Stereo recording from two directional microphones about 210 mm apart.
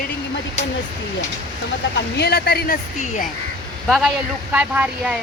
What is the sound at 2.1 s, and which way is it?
Speech, 50° left (ahead or behind).